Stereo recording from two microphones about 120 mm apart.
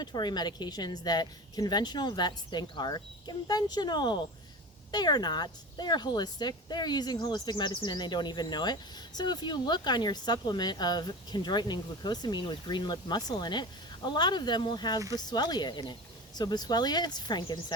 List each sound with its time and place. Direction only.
0.0 s speech: 35° left (ahead or behind)